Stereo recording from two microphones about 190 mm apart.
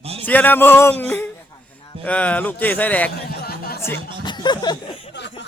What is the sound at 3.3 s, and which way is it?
Chatter, 55° left (ahead or behind).